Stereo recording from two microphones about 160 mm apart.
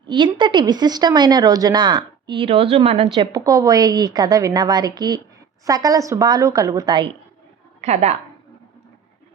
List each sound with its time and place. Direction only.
0.0 s speech: 30° right (ahead or behind)
3.2 s speech: 25° right (ahead or behind)
7.8 s a woman's voice: 45° right (ahead or behind)